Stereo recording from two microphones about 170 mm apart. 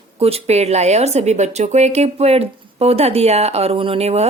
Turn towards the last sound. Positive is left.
turn(degrees=-40)  # may be behind; listen again after turning